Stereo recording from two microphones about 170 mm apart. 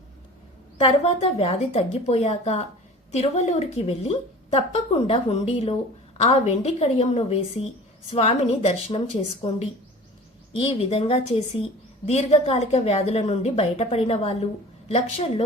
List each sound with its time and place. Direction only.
0.8 s a woman's voice: 35° left (ahead or behind)